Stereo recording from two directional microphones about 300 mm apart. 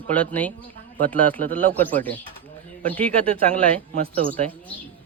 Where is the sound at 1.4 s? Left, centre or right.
Right.